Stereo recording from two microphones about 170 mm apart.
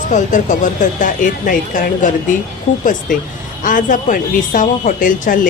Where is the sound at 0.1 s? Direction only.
45° left (ahead or behind).